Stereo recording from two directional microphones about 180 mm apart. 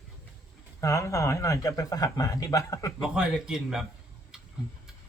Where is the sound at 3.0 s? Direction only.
5° right (ahead or behind).